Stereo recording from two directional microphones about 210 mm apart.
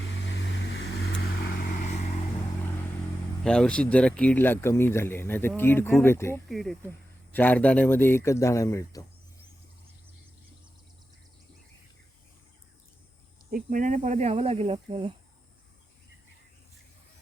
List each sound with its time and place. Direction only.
0.3 s vehicle: 55° left (ahead or behind); by 2.0 s 40° left (ahead or behind)
3.4 s speech: 5° left (ahead or behind)
6.5 s speech: centre (ahead or behind)
13.5 s speech: 40° right (ahead or behind); by 15.1 s 25° right (ahead or behind)